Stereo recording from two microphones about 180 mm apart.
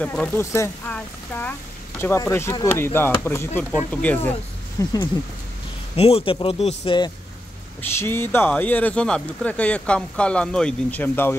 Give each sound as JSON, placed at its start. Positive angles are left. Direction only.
{"t": 0.0, "sound": "speech", "side_deg": 5}
{"t": 4.8, "sound": "speech", "side_deg": 20}
{"t": 5.9, "sound": "speech", "side_deg": 35}
{"t": 7.8, "sound": "speech", "side_deg": 10}